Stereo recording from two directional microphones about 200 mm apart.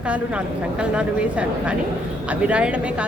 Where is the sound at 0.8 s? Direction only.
5° right (ahead or behind).